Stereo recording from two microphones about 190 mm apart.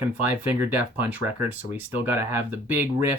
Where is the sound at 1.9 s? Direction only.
10° right (ahead or behind).